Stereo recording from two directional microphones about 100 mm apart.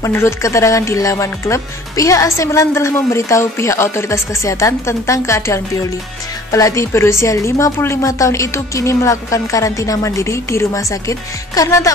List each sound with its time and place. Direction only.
0.0 s speech: 30° left (ahead or behind)